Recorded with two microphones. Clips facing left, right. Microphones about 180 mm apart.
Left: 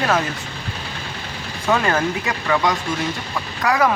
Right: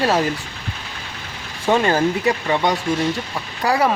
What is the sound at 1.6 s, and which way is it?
Speech, 30° right (ahead or behind).